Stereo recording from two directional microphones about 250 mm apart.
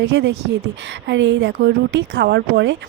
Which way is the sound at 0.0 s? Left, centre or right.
Right.